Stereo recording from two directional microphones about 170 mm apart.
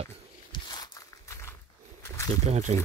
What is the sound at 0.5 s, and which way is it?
Walk, 25° left (ahead or behind).